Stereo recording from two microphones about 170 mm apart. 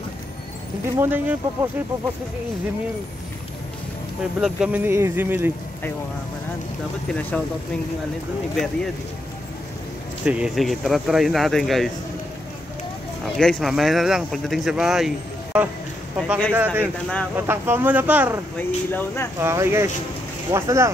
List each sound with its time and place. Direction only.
0.9 s speech: 10° right (ahead or behind)
4.2 s speech: 5° right (ahead or behind)
7.1 s speech: 5° left (ahead or behind)
10.2 s speech: 5° right (ahead or behind)
13.2 s speech: 5° left (ahead or behind)
16.5 s speech: 10° right (ahead or behind)
18.6 s speech: 10° left (ahead or behind)
19.4 s speech: 15° right (ahead or behind)